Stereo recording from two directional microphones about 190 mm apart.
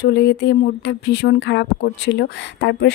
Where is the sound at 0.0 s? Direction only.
65° left (ahead or behind).